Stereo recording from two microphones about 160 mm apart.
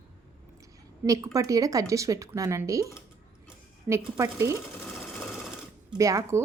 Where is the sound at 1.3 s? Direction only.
20° right (ahead or behind).